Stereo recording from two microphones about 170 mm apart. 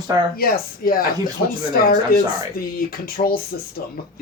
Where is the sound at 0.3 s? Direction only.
60° left (ahead or behind).